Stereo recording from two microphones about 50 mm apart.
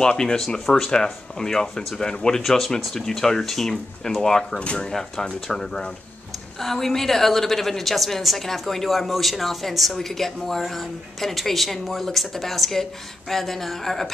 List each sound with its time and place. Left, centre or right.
0.0 s speech: centre
0.7 s a woman's voice: centre